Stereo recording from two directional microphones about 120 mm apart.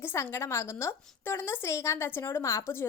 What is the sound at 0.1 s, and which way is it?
A woman's voice, 25° left (ahead or behind).